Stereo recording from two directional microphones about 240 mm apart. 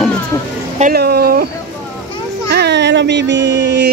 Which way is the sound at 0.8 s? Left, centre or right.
Right.